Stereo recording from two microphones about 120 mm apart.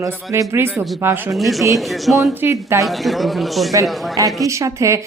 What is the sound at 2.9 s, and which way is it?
Speech, centre (ahead or behind).